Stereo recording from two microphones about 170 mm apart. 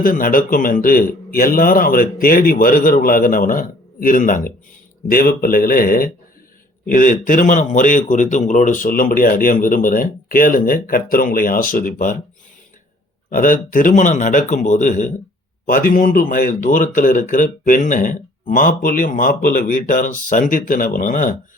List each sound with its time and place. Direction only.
0.0 s a man's voice: 55° left (ahead or behind)
13.3 s speech: 55° left (ahead or behind)